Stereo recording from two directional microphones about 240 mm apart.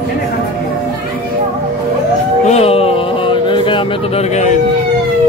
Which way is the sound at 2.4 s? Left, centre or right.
Left.